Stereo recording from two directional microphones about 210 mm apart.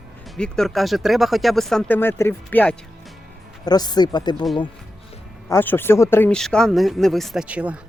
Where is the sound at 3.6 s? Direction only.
20° left (ahead or behind).